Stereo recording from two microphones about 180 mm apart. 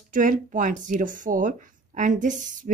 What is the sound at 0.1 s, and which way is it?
Speech, 45° right (ahead or behind).